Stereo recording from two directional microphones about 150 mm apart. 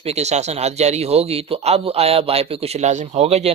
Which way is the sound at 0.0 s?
45° right (ahead or behind).